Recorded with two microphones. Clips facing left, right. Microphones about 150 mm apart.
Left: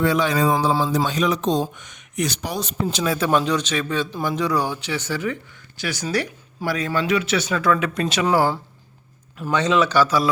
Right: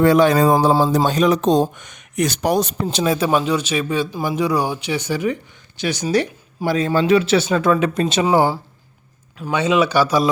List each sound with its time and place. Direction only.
0.0 s speech: 50° right (ahead or behind)
2.9 s a man's voice: 25° right (ahead or behind)
3.2 s a man's voice: 10° right (ahead or behind)
9.5 s a man's voice: 10° right (ahead or behind)